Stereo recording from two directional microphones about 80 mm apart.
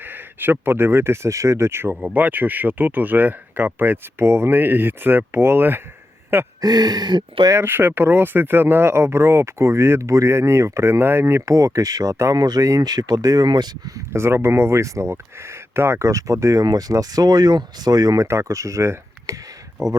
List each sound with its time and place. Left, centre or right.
0.0 s speech: right
6.6 s speech: right
7.6 s speech: right
14.1 s speech: right
18.3 s speech: right